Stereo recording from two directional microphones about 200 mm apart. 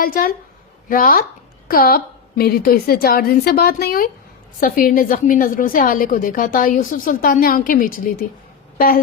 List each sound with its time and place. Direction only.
0.0 s a woman's voice: 45° left (ahead or behind)